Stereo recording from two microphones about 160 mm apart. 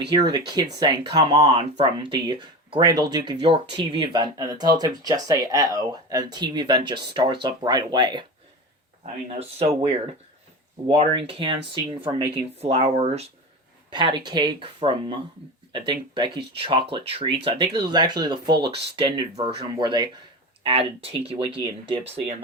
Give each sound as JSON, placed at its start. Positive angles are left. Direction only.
{"t": 0.3, "sound": "speech", "side_deg": -25}
{"t": 9.4, "sound": "speech", "side_deg": -40}
{"t": 13.9, "sound": "speech", "side_deg": -30}